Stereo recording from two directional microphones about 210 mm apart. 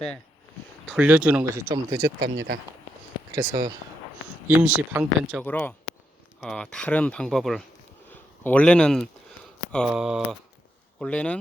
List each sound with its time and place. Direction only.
0.9 s speech: 5° right (ahead or behind)
1.6 s speech: 15° right (ahead or behind)
3.3 s speech: 15° right (ahead or behind)
5.4 s speech: 5° left (ahead or behind)